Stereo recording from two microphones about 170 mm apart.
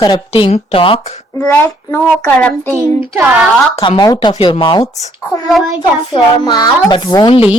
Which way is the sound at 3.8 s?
25° left (ahead or behind).